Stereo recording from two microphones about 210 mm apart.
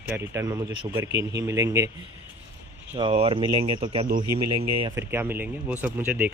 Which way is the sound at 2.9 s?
25° right (ahead or behind).